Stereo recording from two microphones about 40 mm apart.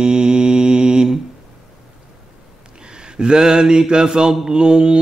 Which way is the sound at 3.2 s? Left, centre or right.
Centre.